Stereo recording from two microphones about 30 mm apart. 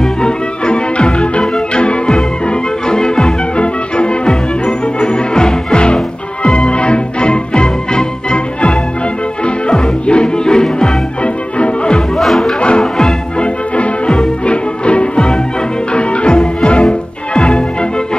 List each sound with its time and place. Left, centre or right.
0.0 s music: left
1.4 s organ: left
1.8 s music: left
12.2 s music: centre
12.5 s music: left
12.8 s music: left
13.4 s music: left